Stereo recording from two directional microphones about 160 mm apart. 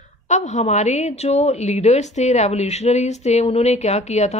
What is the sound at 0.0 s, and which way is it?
A woman's voice, 45° left (ahead or behind).